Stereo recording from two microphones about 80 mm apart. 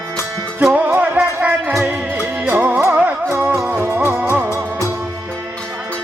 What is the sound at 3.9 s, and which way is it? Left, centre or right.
Music, right.